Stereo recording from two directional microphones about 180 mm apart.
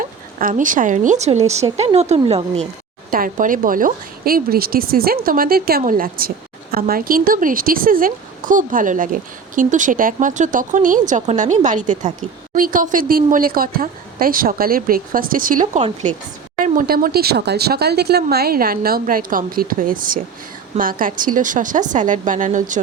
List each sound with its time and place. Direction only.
0.0 s speech: 45° right (ahead or behind)
3.1 s a woman's voice: 50° right (ahead or behind)